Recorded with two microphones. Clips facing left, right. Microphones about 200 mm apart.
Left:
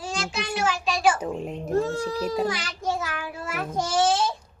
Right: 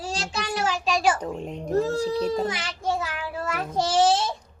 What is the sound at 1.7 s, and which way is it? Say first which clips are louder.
Speech: right 2 dB; 40° right (ahead or behind).